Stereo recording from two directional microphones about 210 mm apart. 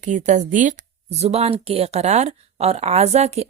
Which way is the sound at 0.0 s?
35° right (ahead or behind).